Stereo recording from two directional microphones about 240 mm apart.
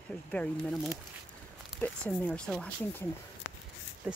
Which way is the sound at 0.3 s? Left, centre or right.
Centre.